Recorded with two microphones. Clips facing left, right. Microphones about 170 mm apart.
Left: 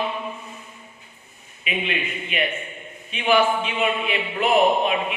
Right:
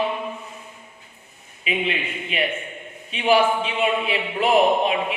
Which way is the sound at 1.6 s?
30° right (ahead or behind).